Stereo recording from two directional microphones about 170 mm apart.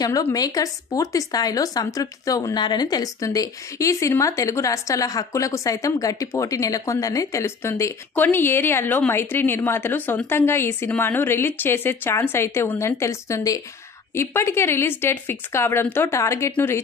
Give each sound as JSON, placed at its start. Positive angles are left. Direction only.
{"t": 0.0, "sound": "speech", "side_deg": 20}